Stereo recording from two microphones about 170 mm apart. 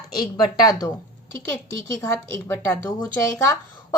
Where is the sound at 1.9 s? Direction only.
15° left (ahead or behind).